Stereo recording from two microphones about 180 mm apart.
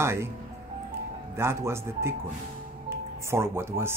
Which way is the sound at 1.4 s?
15° right (ahead or behind).